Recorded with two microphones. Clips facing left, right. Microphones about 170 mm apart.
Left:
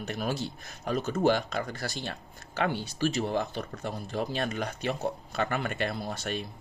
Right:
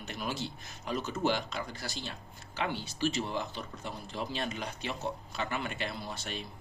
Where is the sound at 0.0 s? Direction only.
45° left (ahead or behind).